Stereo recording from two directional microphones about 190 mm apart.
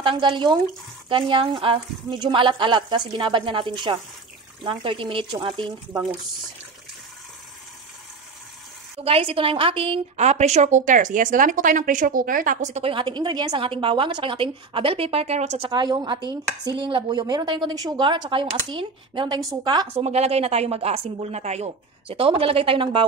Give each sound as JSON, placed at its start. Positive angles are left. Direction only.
{"t": 0.0, "sound": "speech", "side_deg": -25}
{"t": 9.0, "sound": "a woman's voice", "side_deg": -30}
{"t": 15.7, "sound": "speech", "side_deg": -25}
{"t": 20.1, "sound": "a woman's voice", "side_deg": -35}